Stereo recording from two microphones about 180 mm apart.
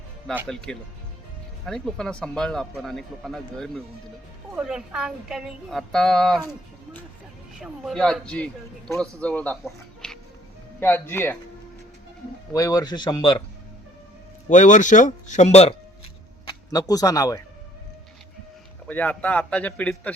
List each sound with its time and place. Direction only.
0.4 s speech: 5° left (ahead or behind)
7.6 s a man's voice: centre (ahead or behind)
12.5 s speech: 20° left (ahead or behind)
14.5 s speech: 45° left (ahead or behind)
16.5 s speech: 20° left (ahead or behind)
18.9 s speech: 10° left (ahead or behind)